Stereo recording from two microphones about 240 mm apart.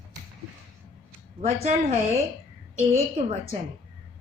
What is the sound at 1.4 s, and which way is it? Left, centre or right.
Speech, right.